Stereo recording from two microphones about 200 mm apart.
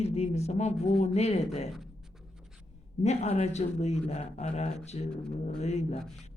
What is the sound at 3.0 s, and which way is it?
A woman's voice, 35° left (ahead or behind).